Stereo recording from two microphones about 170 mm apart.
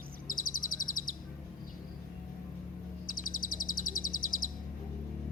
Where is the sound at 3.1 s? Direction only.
55° left (ahead or behind).